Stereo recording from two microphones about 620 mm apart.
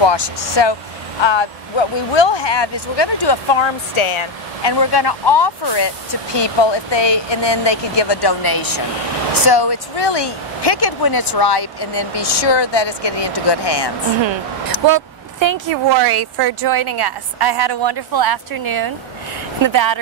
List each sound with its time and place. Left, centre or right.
0.0 s speech: left
14.9 s a woman's voice: right
16.8 s a woman's voice: right
17.4 s a woman's voice: right
19.6 s a woman's voice: right